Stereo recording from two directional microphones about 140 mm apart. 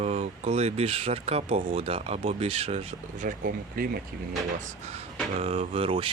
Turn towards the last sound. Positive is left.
turn(degrees=-40)  # may be behind; listen again after turning